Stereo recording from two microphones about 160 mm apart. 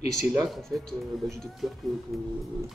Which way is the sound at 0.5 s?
Centre (ahead or behind).